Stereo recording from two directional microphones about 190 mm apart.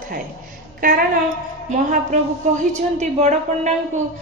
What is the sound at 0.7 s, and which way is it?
A woman's voice, 45° right (ahead or behind).